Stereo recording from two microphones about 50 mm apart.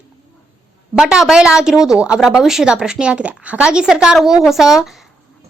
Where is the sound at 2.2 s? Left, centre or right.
Centre.